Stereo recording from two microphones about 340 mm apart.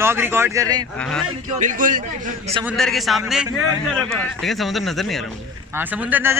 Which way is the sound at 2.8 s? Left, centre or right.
Centre.